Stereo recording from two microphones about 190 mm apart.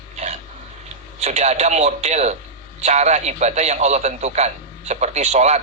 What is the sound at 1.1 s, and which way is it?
A man's voice, 35° right (ahead or behind).